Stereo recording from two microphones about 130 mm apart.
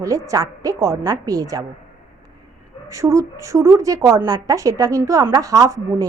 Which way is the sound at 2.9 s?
25° right (ahead or behind).